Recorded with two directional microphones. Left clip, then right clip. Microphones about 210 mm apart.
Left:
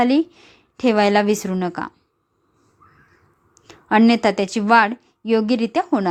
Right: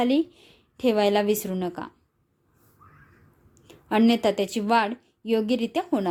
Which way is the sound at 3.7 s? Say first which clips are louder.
Left 6 dB; 20° left (ahead or behind).